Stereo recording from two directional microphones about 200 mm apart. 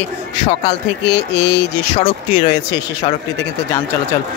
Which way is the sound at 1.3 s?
60° left (ahead or behind).